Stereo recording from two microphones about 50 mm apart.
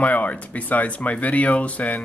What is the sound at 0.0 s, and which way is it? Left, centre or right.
Speech, left.